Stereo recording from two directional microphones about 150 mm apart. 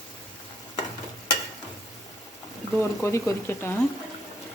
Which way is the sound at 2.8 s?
15° left (ahead or behind).